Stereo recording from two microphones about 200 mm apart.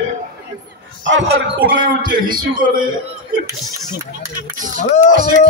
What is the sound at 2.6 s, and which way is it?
Speech, 45° right (ahead or behind).